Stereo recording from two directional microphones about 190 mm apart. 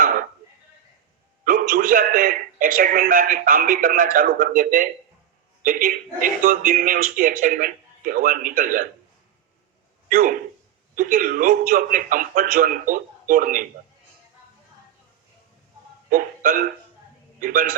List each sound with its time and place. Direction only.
1.5 s a man's voice: 50° right (ahead or behind)
10.1 s a man's voice: 45° right (ahead or behind)
16.0 s a man's voice: 45° right (ahead or behind)